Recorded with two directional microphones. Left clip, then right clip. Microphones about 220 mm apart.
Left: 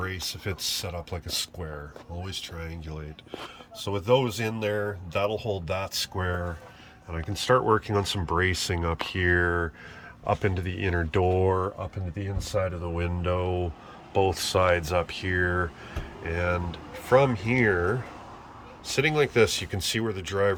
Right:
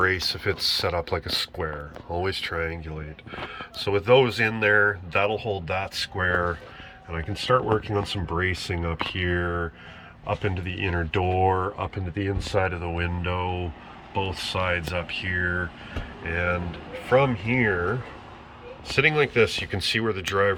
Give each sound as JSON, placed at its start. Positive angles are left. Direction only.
{"t": 0.0, "sound": "speech", "side_deg": -5}
{"t": 12.8, "sound": "speech", "side_deg": 0}